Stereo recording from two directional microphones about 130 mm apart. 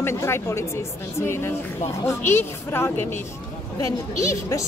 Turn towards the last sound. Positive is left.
turn(degrees=25)  # may be behind; listen again after turning